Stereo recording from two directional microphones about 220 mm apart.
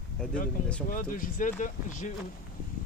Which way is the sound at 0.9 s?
40° left (ahead or behind).